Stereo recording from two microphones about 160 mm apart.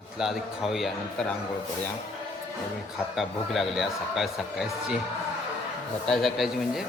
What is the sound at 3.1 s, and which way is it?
A man's voice, centre (ahead or behind).